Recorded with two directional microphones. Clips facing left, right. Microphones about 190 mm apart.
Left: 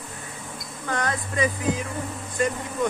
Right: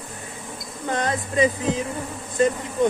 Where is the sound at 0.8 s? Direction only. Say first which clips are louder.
Right 3 dB; 20° right (ahead or behind).